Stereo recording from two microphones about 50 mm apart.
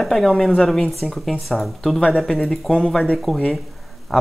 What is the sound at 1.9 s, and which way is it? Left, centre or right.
Speech, centre.